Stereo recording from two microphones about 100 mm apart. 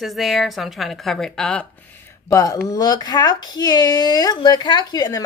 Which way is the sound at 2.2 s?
35° left (ahead or behind).